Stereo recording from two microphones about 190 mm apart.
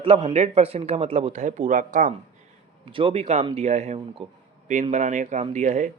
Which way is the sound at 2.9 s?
30° right (ahead or behind).